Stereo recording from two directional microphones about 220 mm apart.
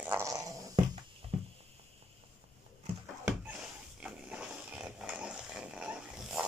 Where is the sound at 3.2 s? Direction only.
5° right (ahead or behind).